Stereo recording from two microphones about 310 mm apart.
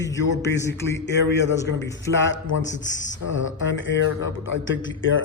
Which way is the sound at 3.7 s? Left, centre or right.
Left.